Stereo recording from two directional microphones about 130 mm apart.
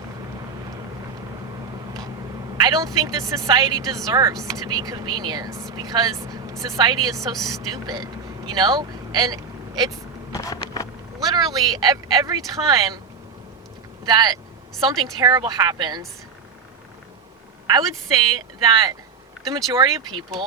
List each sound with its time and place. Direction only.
1.9 s a woman's voice: 30° right (ahead or behind)
10.4 s a sound: 30° left (ahead or behind)
11.2 s speech: 30° right (ahead or behind)
14.0 s a woman's voice: 30° right (ahead or behind)
17.7 s a woman's voice: 30° right (ahead or behind)